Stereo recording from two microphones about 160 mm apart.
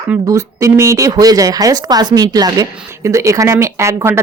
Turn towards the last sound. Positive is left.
turn(degrees=-15)  # may be behind; listen again after turning